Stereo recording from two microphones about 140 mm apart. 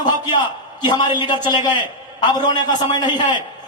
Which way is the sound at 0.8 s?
35° left (ahead or behind).